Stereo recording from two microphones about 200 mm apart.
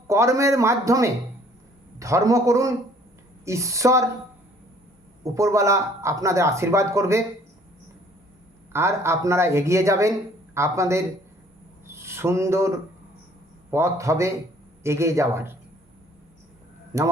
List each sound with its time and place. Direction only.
0.1 s speech: 15° right (ahead or behind)
5.2 s speech: 15° right (ahead or behind)
8.7 s speech: 15° right (ahead or behind)
16.9 s speech: 15° right (ahead or behind)